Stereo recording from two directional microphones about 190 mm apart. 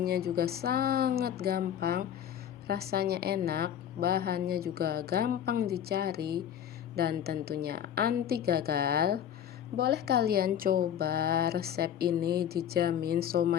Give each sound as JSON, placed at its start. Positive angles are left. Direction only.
{"t": 0.0, "sound": "speech", "side_deg": -55}